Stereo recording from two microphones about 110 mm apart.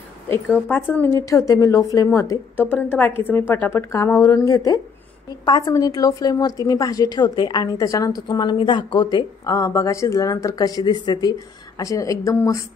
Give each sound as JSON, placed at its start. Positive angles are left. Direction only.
{"t": 0.3, "sound": "a woman's voice", "side_deg": 20}
{"t": 1.3, "sound": "a woman's voice", "side_deg": 30}
{"t": 9.6, "sound": "speech", "side_deg": 30}